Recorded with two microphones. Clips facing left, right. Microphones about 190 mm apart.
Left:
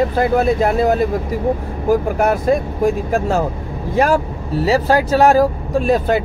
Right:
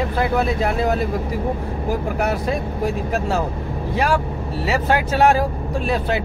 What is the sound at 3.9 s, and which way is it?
Speech, 45° left (ahead or behind).